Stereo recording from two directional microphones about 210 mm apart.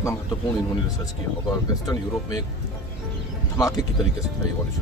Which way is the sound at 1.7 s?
15° left (ahead or behind).